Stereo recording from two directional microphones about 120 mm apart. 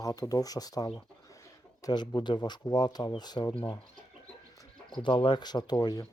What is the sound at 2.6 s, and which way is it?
Speech, 35° left (ahead or behind).